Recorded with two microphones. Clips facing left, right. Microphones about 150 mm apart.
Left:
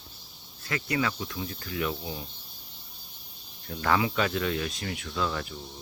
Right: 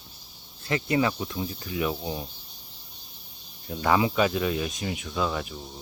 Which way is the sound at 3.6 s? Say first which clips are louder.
Right 3 dB; 15° right (ahead or behind).